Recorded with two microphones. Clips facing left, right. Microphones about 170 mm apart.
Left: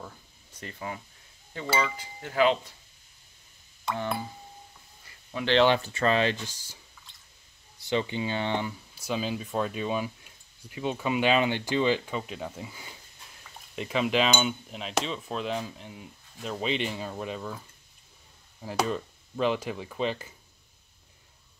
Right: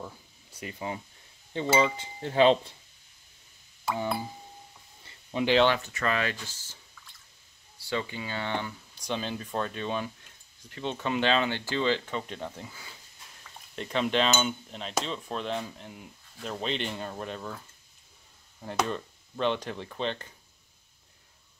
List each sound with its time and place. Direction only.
0.0 s a sound: 10° right (ahead or behind)
1.5 s cutlery: 25° right (ahead or behind)
3.8 s a sound: 10° right (ahead or behind)
5.3 s cutlery: 20° right (ahead or behind)
5.7 s speech: 30° left (ahead or behind); by 12.7 s 5° left (ahead or behind)
13.7 s cutlery: 5° left (ahead or behind)
18.9 s cutlery: 5° left (ahead or behind)